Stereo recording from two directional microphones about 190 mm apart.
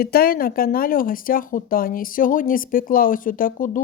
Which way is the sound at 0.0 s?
50° left (ahead or behind).